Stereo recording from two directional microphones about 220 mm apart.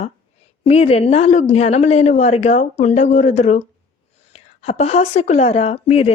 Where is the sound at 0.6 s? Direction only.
30° left (ahead or behind).